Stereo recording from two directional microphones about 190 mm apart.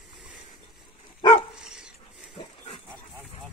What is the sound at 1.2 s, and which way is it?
Dog, 25° left (ahead or behind).